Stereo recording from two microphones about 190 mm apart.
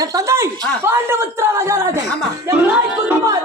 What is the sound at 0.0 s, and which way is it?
Speech, 15° right (ahead or behind).